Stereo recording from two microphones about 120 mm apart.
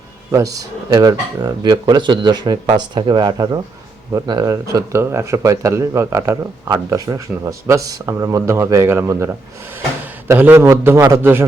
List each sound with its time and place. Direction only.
0.3 s a man's voice: 30° right (ahead or behind)